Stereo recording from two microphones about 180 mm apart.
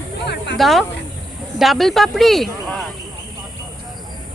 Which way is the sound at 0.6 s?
Centre (ahead or behind).